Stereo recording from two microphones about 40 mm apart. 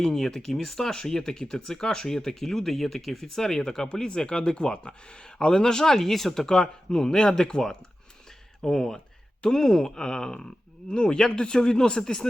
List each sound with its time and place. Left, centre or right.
0.0 s speech: centre